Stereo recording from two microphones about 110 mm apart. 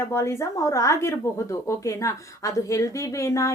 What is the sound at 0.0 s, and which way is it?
Speech, 25° left (ahead or behind).